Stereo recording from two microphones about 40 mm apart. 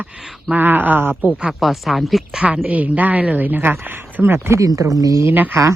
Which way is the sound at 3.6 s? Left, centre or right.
Right.